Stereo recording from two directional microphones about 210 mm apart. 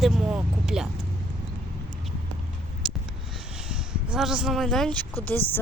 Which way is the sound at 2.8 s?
Centre (ahead or behind).